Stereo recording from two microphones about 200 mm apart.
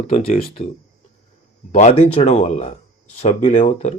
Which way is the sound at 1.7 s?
35° left (ahead or behind).